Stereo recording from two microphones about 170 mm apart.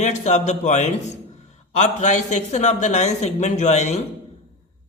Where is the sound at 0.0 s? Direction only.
45° left (ahead or behind).